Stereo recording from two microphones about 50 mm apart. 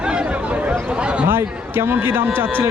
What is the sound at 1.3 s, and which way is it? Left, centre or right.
Speech, right.